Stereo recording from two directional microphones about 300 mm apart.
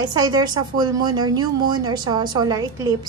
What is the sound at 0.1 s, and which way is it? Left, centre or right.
Speech, centre.